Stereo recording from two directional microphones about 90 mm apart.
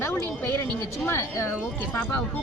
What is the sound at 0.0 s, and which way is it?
A woman's voice, 25° left (ahead or behind).